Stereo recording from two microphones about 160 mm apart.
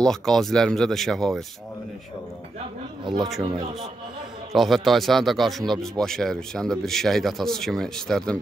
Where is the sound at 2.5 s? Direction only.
30° right (ahead or behind).